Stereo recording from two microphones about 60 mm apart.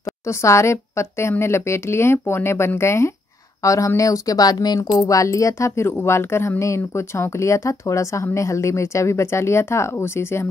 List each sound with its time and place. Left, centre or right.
0.2 s speech: left
3.6 s speech: left